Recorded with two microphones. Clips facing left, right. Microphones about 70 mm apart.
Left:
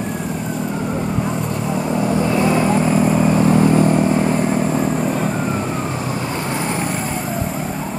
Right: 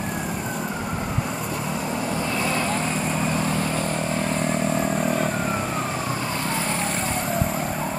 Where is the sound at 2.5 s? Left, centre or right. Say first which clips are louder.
Left 9 dB; centre.